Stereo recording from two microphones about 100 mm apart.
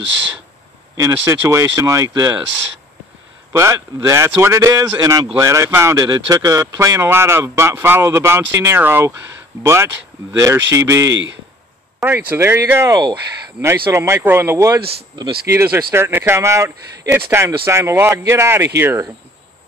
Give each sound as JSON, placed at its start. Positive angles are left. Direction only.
{"t": 1.1, "sound": "a man's voice", "side_deg": -25}
{"t": 3.5, "sound": "a man's voice", "side_deg": -30}
{"t": 6.0, "sound": "a man's voice", "side_deg": -40}
{"t": 12.0, "sound": "speech", "side_deg": -20}
{"t": 12.9, "sound": "speech", "side_deg": -40}